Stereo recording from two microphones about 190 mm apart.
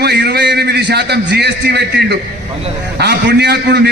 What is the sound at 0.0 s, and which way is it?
A man's voice, 60° right (ahead or behind).